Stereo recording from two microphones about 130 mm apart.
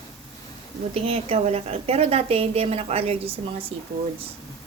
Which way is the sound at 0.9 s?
50° right (ahead or behind).